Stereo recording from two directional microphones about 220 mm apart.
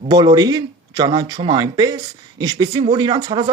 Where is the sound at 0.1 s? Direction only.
20° right (ahead or behind).